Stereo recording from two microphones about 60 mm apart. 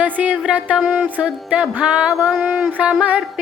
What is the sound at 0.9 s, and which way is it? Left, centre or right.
Mantra, right.